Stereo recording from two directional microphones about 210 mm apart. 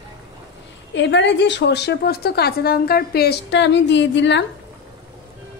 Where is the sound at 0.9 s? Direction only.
60° left (ahead or behind).